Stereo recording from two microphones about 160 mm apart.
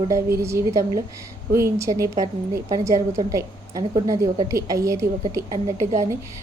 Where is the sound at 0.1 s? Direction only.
15° right (ahead or behind).